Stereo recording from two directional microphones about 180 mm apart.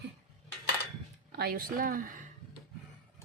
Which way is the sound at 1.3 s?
60° right (ahead or behind).